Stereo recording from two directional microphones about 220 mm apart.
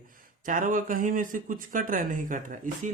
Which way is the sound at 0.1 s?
40° right (ahead or behind).